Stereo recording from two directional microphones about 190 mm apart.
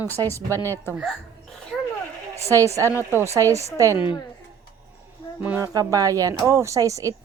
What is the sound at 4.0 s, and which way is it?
Speech, 25° left (ahead or behind).